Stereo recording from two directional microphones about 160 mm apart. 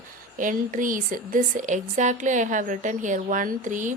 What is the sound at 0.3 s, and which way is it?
A woman's voice, 55° right (ahead or behind).